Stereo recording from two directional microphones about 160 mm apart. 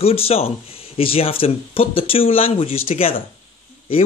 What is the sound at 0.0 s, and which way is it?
A man's voice, 40° left (ahead or behind).